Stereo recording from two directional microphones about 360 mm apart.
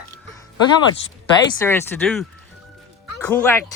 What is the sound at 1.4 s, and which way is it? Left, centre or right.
Speech, centre.